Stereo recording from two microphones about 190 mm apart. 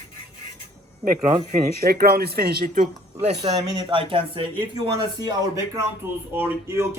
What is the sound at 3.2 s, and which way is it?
Speech, 35° right (ahead or behind).